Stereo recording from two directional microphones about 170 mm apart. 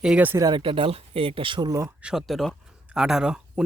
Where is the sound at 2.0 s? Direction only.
5° right (ahead or behind).